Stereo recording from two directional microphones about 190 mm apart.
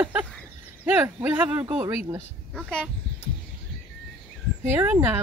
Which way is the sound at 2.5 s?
5° left (ahead or behind).